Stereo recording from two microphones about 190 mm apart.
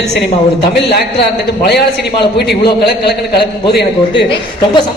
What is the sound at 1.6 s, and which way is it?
A man's voice, 60° left (ahead or behind).